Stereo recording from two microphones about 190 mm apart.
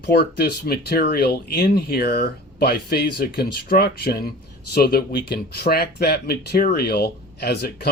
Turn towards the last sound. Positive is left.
turn(degrees=60)  # may be behind; listen again after turning